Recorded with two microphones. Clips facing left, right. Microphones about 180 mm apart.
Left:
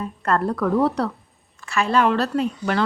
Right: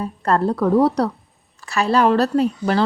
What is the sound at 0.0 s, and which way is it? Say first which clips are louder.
Speech: right 3 dB; 35° right (ahead or behind).